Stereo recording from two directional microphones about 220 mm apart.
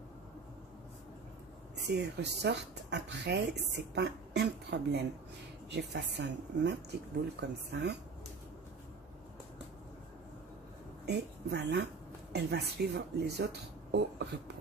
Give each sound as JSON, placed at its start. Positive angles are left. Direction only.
{"t": 2.0, "sound": "speech", "side_deg": -50}
{"t": 11.1, "sound": "a woman's voice", "side_deg": -50}